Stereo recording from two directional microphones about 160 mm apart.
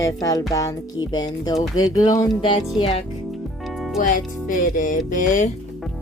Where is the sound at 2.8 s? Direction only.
35° left (ahead or behind).